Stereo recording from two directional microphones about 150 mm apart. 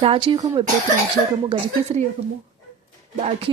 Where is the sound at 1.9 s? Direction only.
45° right (ahead or behind).